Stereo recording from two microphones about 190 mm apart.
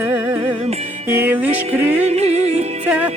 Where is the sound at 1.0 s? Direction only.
10° right (ahead or behind).